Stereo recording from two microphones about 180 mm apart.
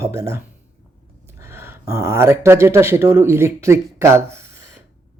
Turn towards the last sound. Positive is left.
turn(degrees=-15)  # may be behind; listen again after turning